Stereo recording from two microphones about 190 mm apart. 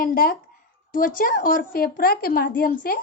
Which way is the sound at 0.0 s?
50° left (ahead or behind).